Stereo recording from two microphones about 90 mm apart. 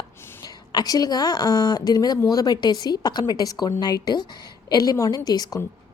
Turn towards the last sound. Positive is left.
turn(degrees=45)  # may be behind; listen again after turning